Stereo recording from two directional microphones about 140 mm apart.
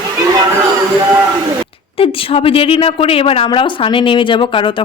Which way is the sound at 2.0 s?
40° left (ahead or behind).